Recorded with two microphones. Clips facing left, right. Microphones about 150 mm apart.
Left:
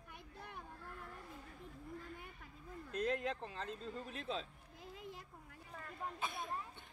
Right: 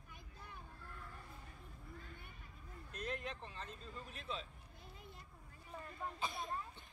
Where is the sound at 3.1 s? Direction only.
90° left.